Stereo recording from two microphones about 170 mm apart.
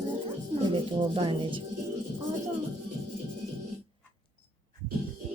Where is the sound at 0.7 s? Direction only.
30° right (ahead or behind).